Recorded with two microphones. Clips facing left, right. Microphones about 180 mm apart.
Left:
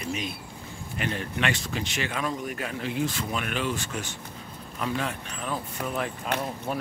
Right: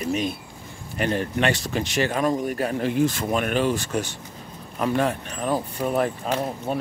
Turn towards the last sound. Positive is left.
turn(degrees=-25)  # may be behind; listen again after turning